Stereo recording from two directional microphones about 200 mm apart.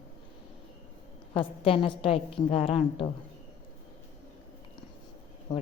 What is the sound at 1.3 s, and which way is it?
Speech, 25° left (ahead or behind).